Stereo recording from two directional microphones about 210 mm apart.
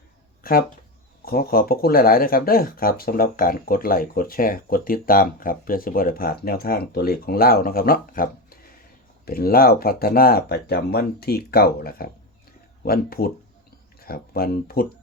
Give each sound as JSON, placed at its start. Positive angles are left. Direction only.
{"t": 1.2, "sound": "speech", "side_deg": 45}